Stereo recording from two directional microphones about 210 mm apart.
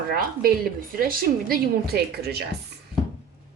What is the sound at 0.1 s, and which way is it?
A woman's voice, 45° right (ahead or behind).